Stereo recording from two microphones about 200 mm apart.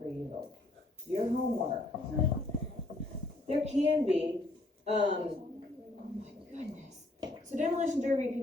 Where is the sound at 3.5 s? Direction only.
35° right (ahead or behind).